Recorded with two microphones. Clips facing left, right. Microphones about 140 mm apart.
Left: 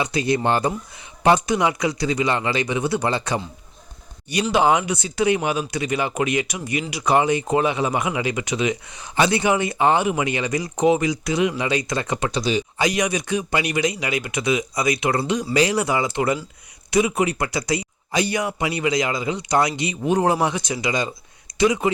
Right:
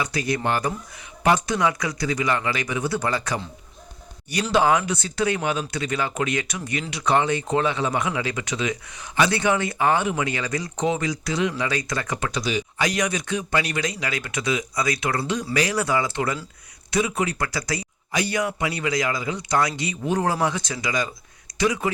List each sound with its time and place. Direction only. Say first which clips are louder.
0.0 s speech: left 4 dB; 25° left (ahead or behind)
4.5 s speech: left 1 dB; 20° left (ahead or behind)
12.9 s speech: left 3 dB; 15° left (ahead or behind)